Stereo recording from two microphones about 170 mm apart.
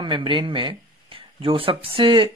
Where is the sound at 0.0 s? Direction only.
30° right (ahead or behind).